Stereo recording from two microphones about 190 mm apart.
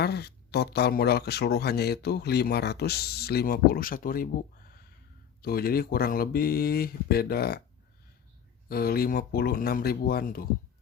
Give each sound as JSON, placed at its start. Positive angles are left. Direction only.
{"t": 0.0, "sound": "speech", "side_deg": 60}
{"t": 8.7, "sound": "speech", "side_deg": 50}